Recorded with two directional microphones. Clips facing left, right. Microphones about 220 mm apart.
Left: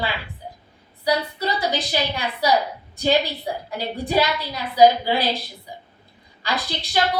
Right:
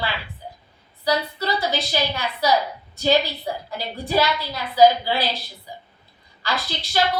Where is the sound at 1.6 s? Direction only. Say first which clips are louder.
Left 1 dB; 15° left (ahead or behind).